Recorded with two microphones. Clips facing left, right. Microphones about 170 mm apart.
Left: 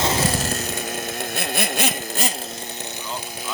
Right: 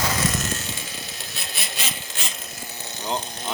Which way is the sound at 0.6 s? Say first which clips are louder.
Left 8 dB; 55° left (ahead or behind).